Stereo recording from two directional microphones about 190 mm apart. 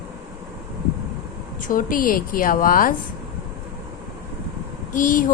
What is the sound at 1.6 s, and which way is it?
Speech, 45° left (ahead or behind).